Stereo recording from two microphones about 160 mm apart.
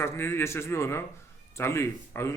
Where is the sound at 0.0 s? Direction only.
15° left (ahead or behind).